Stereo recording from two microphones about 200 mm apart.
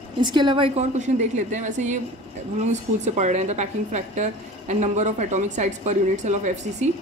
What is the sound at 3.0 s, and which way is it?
A woman's voice, 35° right (ahead or behind).